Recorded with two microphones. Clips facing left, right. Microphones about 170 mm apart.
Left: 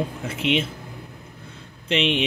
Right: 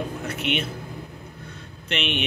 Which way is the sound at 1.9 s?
90° left.